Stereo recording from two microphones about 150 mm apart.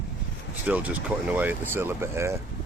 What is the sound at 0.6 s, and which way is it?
Speech, 10° right (ahead or behind).